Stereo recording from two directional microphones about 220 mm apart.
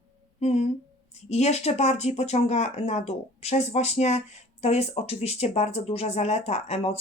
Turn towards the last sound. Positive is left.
turn(degrees=30)  # may be behind; listen again after turning